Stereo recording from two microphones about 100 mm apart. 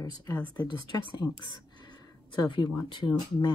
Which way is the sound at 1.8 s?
45° left (ahead or behind).